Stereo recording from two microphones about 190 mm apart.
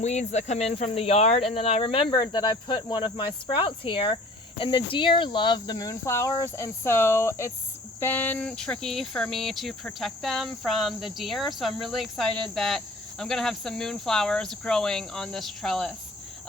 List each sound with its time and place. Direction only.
0.0 s speech: 35° left (ahead or behind); by 16.0 s centre (ahead or behind)